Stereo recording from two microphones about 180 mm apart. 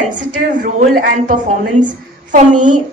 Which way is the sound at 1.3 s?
45° right (ahead or behind).